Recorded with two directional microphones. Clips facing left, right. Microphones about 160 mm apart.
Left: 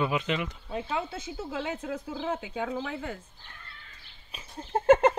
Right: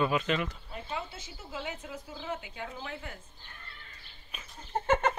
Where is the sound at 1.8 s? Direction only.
90° left.